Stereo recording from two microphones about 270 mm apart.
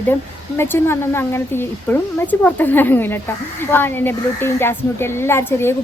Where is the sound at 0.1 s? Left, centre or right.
Centre.